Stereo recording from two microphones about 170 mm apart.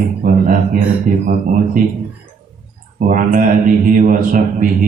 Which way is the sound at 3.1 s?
50° right (ahead or behind).